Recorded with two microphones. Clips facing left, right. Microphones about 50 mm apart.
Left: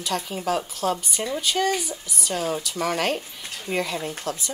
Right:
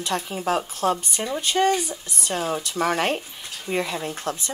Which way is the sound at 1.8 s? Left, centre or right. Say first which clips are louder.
Right 2 dB; right.